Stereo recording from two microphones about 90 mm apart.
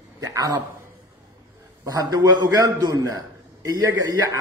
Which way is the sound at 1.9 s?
40° right (ahead or behind).